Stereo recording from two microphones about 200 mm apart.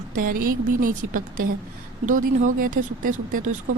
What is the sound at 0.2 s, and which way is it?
Speech, 45° right (ahead or behind).